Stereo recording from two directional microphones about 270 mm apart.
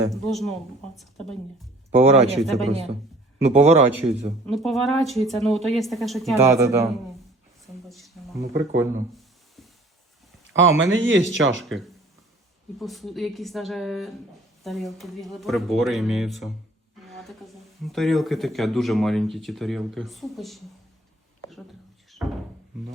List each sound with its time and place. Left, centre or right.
0.3 s speech: centre
2.0 s a man's voice: right
4.4 s speech: centre
6.6 s a man's voice: centre
7.9 s a sound: centre
8.4 s speech: right
8.8 s a sound: centre
10.5 s speech: right
12.8 s speech: centre